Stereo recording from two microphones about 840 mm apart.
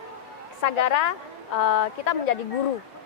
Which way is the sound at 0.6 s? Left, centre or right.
Left.